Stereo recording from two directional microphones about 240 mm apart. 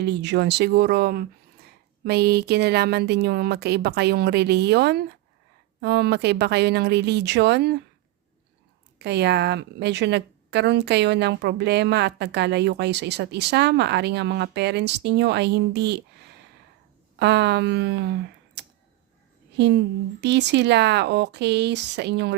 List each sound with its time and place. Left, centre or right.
0.0 s a woman's voice: right
9.0 s a woman's voice: right